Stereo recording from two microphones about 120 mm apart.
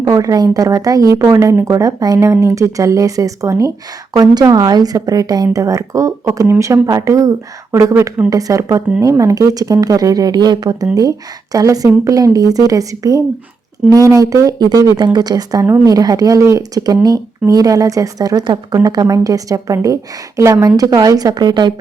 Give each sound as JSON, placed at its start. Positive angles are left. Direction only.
{"t": 0.0, "sound": "speech", "side_deg": -30}